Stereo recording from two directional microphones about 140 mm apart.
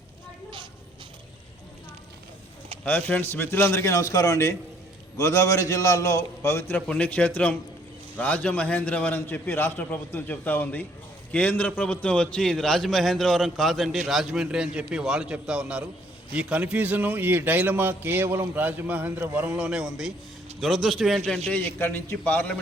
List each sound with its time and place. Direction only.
3.1 s a man's voice: 15° left (ahead or behind)
21.5 s a man's voice: 15° left (ahead or behind)